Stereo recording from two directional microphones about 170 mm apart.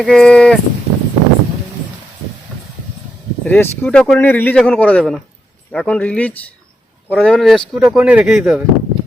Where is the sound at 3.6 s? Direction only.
10° left (ahead or behind).